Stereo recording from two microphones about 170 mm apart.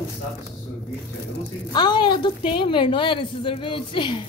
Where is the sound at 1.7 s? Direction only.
25° left (ahead or behind).